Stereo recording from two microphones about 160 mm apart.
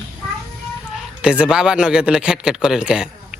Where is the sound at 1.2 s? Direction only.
5° right (ahead or behind).